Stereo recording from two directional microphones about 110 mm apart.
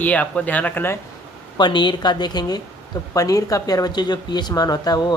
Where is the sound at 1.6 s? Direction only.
45° left (ahead or behind).